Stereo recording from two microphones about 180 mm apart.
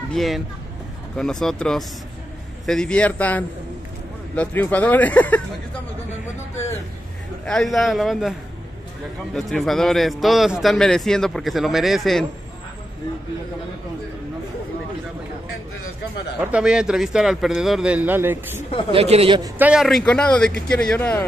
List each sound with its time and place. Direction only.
0.1 s a man's voice: centre (ahead or behind)
7.4 s a man's voice: centre (ahead or behind)
16.3 s a man's voice: 5° right (ahead or behind)
18.9 s speech: 30° right (ahead or behind)
19.6 s a man's voice: 5° right (ahead or behind)